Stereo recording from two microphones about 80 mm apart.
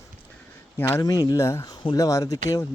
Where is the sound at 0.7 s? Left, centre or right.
Left.